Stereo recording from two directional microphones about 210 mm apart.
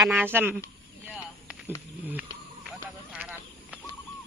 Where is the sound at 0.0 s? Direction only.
10° right (ahead or behind).